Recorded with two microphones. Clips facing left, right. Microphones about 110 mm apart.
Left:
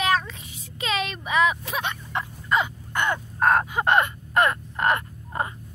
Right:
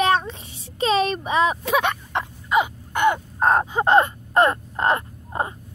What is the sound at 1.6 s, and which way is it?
Speech, 65° right (ahead or behind).